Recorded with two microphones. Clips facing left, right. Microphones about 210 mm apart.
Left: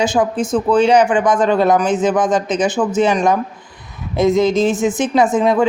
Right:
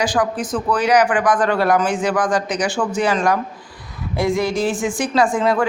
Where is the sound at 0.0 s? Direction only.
25° left (ahead or behind).